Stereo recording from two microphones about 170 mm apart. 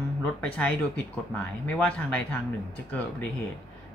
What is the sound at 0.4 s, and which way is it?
Speech, 10° left (ahead or behind).